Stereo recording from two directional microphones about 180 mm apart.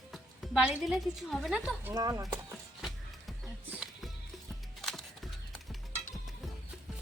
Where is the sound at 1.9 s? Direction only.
20° right (ahead or behind).